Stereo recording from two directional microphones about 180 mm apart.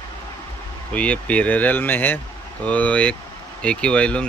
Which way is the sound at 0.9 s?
5° left (ahead or behind).